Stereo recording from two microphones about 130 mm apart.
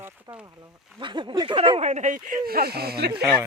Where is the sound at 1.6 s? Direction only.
50° right (ahead or behind).